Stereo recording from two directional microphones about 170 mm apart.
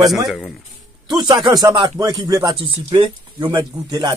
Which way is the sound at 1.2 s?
25° right (ahead or behind).